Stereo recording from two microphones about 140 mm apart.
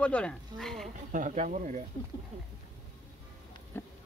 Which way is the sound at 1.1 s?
65° right (ahead or behind).